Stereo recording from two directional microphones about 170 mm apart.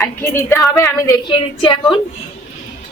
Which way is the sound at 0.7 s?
20° left (ahead or behind).